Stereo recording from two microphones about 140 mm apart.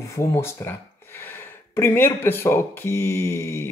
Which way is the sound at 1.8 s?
15° left (ahead or behind).